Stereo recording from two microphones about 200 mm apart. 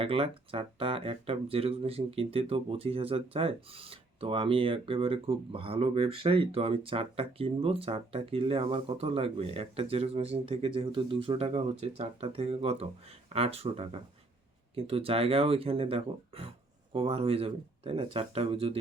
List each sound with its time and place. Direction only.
0.0 s speech: 25° right (ahead or behind)